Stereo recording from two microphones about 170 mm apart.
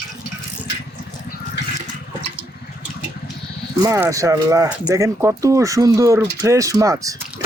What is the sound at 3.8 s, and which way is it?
Speech, 20° right (ahead or behind).